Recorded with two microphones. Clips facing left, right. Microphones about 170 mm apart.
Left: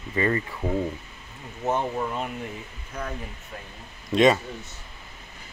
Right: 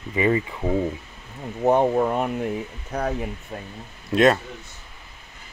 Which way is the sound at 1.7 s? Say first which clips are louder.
Right 8 dB; 55° right (ahead or behind).